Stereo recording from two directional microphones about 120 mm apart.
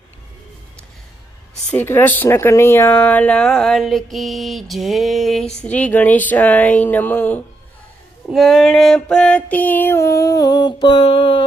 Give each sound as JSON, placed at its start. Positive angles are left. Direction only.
{"t": 1.7, "sound": "speech", "side_deg": 20}
{"t": 8.3, "sound": "speech", "side_deg": 0}
{"t": 10.9, "sound": "a sound", "side_deg": 50}